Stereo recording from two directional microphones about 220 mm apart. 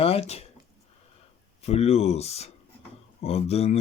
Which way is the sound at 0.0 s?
25° left (ahead or behind).